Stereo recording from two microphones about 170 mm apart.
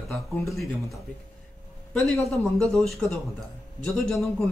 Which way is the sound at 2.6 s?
Centre (ahead or behind).